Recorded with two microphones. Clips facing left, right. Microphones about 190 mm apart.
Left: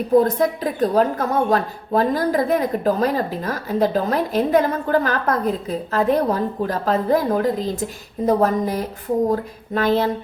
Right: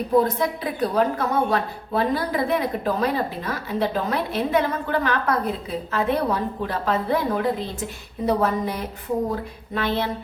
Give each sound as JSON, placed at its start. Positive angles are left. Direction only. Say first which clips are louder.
{"t": 0.2, "sound": "a woman's voice", "louder": "left 4 dB", "side_deg": 45}